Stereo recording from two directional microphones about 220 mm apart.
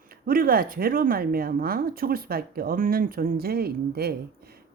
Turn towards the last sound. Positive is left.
turn(degrees=-45)  # may be behind; listen again after turning